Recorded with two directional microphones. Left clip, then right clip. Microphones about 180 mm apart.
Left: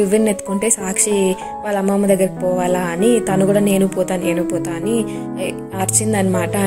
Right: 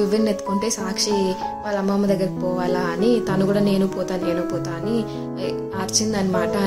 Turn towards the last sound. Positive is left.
turn(degrees=15)  # may be behind; listen again after turning